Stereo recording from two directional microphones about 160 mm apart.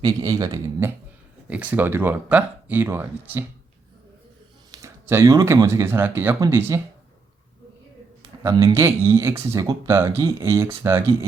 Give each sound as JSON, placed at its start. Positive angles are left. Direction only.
{"t": 0.0, "sound": "speech", "side_deg": -25}
{"t": 1.5, "sound": "speech", "side_deg": -10}
{"t": 4.7, "sound": "speech", "side_deg": -20}
{"t": 8.4, "sound": "speech", "side_deg": -25}